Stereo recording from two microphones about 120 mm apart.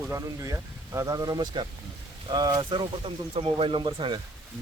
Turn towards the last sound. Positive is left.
turn(degrees=-40)  # may be behind; listen again after turning